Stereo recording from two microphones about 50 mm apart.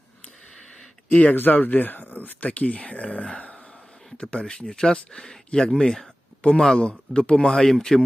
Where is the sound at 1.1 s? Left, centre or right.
Left.